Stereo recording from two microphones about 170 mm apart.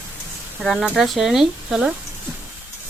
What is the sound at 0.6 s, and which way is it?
Speech, centre (ahead or behind).